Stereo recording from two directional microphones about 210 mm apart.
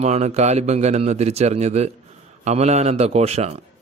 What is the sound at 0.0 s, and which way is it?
A man's voice, 30° right (ahead or behind).